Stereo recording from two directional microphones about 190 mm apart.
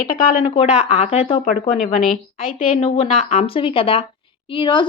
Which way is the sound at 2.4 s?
30° left (ahead or behind).